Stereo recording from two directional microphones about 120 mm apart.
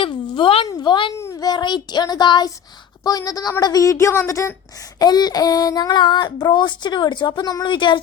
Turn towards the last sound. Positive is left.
turn(degrees=40)  # may be behind; listen again after turning